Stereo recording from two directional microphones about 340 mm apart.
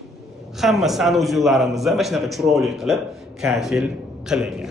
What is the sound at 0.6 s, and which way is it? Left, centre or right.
A man's voice, centre.